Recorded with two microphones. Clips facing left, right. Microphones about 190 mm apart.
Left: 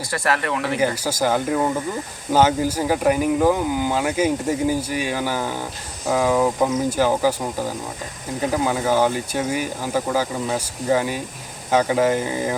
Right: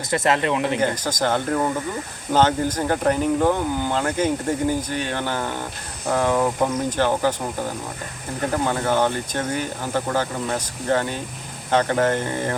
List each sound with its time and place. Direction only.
0.1 s speech: 20° right (ahead or behind)
1.0 s speech: 10° left (ahead or behind)